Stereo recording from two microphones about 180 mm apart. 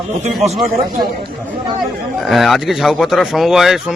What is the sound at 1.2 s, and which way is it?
Speech, 25° right (ahead or behind).